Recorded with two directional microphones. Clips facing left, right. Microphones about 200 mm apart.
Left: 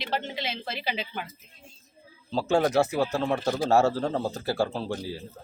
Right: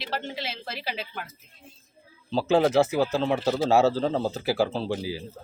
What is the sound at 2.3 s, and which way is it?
A man's voice, 5° right (ahead or behind).